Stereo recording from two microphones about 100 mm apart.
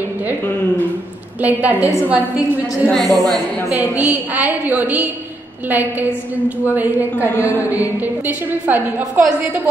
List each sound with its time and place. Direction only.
1.4 s a woman's voice: 15° right (ahead or behind)
2.9 s a woman's voice: centre (ahead or behind)
4.1 s a woman's voice: 20° right (ahead or behind)